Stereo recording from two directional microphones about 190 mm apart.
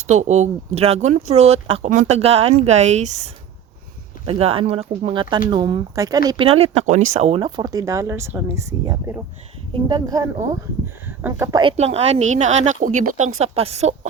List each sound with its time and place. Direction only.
0.1 s speech: 35° right (ahead or behind); by 11.6 s 10° right (ahead or behind)
11.6 s speech: 35° right (ahead or behind)